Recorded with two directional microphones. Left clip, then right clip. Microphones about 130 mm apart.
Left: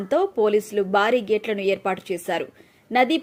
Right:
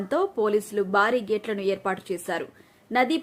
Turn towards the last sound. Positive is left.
turn(degrees=15)  # may be behind; listen again after turning